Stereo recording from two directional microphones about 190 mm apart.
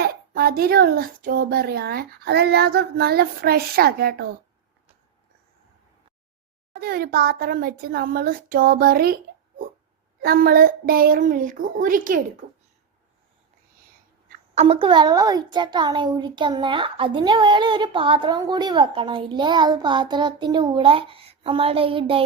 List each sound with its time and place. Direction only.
0.0 s a child's voice: 55° right (ahead or behind)
6.7 s speech: 50° right (ahead or behind)
10.2 s speech: 50° right (ahead or behind)
14.5 s a child's voice: 30° right (ahead or behind)